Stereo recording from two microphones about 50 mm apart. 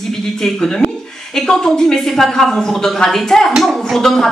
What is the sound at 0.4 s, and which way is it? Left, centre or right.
Speech, centre.